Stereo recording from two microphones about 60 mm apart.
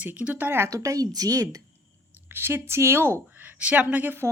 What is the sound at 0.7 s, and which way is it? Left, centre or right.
Speech, right.